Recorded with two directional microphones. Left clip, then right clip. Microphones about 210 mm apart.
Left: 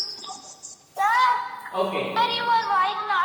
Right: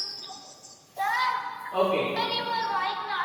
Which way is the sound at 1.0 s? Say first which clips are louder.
Left 6 dB; 25° left (ahead or behind).